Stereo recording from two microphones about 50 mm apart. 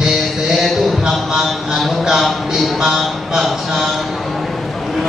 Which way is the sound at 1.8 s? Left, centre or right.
Centre.